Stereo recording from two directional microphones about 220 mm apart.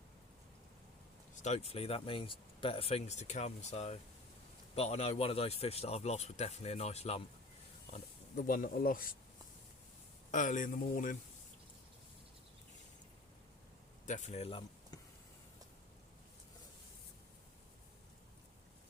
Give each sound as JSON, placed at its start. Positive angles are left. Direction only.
{"t": 1.4, "sound": "speech", "side_deg": 30}
{"t": 10.3, "sound": "speech", "side_deg": 35}
{"t": 14.1, "sound": "speech", "side_deg": 30}